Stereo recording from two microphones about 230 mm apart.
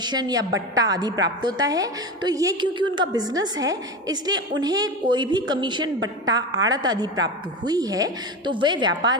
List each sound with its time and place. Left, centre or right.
0.0 s a woman's voice: centre